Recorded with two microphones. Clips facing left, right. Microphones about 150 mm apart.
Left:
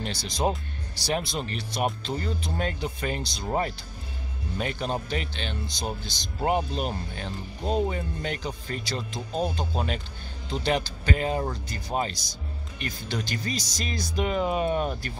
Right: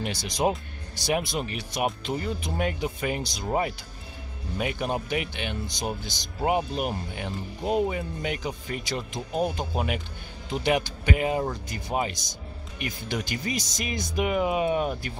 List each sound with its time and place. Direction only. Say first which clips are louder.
0.0 s speech: right 2 dB; 15° right (ahead or behind)